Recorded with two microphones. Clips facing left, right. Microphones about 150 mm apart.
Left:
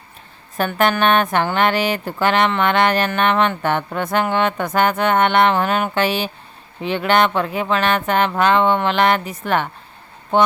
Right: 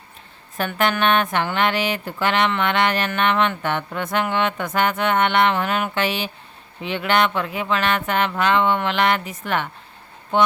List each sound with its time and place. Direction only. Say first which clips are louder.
0.5 s speech: left 4 dB; 40° left (ahead or behind)